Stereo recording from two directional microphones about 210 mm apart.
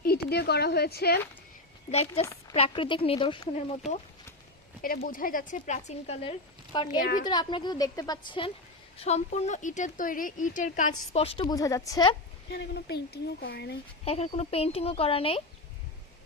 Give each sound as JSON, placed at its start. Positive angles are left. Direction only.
{"t": 0.0, "sound": "speech", "side_deg": 50}
{"t": 1.9, "sound": "speech", "side_deg": 30}
{"t": 4.8, "sound": "speech", "side_deg": 45}
{"t": 7.0, "sound": "speech", "side_deg": 40}
{"t": 7.3, "sound": "speech", "side_deg": 20}
{"t": 12.5, "sound": "speech", "side_deg": 50}
{"t": 14.0, "sound": "speech", "side_deg": 30}